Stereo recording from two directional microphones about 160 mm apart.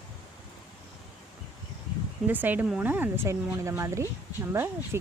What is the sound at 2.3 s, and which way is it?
Speech, 10° right (ahead or behind).